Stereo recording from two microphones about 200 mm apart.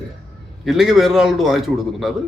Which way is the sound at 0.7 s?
Centre (ahead or behind).